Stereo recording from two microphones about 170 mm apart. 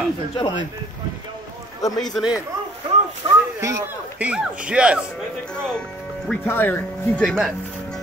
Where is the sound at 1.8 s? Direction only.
20° left (ahead or behind).